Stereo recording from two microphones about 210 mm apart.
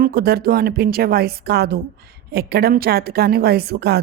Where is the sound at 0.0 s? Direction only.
50° right (ahead or behind).